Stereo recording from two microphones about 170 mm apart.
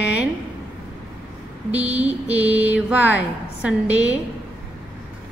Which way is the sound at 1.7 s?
10° right (ahead or behind).